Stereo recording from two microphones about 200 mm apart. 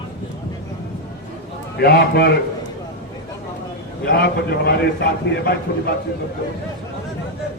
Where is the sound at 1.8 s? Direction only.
55° left (ahead or behind).